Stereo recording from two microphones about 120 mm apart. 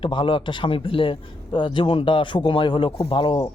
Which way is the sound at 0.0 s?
45° left (ahead or behind).